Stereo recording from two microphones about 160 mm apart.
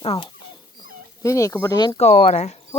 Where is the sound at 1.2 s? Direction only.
20° left (ahead or behind).